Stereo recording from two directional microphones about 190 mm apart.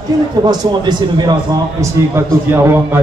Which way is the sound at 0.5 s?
20° right (ahead or behind).